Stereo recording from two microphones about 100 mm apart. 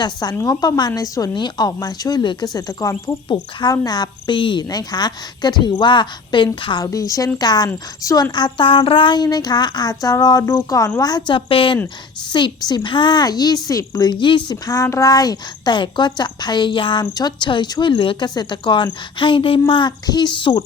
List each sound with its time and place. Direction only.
0.0 s a woman's voice: 40° left (ahead or behind)
3.2 s a woman's voice: 55° left (ahead or behind)
3.7 s a woman's voice: 45° left (ahead or behind)
4.7 s a woman's voice: 40° left (ahead or behind)
6.8 s a woman's voice: 35° left (ahead or behind)
10.4 s speech: 25° left (ahead or behind)
10.7 s a woman's voice: 35° left (ahead or behind)
11.3 s a woman's voice: 60° left (ahead or behind)
12.3 s a woman's voice: 50° left (ahead or behind)
14.5 s a woman's voice: 35° left (ahead or behind); by 18.3 s 60° left (ahead or behind)
18.3 s a woman's voice: 50° left (ahead or behind)